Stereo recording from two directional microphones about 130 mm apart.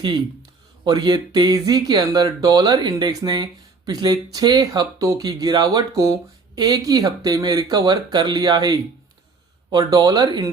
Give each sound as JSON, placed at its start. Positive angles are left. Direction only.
{"t": 0.9, "sound": "speech", "side_deg": -35}